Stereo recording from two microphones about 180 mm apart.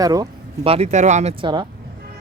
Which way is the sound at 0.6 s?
35° right (ahead or behind).